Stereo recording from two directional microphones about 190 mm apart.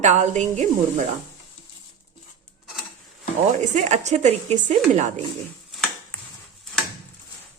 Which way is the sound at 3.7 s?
40° right (ahead or behind).